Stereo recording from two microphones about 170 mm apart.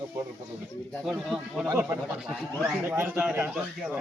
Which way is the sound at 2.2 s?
5° right (ahead or behind).